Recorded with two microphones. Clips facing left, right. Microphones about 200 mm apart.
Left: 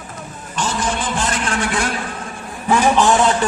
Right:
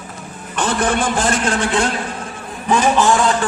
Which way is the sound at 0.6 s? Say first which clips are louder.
Right 4 dB; 60° right (ahead or behind).